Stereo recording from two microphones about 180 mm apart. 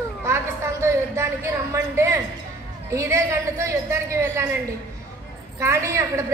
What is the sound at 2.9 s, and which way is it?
A man's voice, 15° right (ahead or behind).